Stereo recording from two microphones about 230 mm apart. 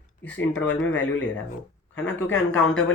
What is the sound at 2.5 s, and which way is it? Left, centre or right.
Speech, left.